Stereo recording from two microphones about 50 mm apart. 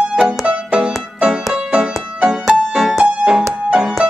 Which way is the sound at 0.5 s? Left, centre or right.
Centre.